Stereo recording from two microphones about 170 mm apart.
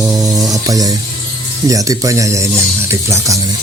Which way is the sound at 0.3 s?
20° right (ahead or behind).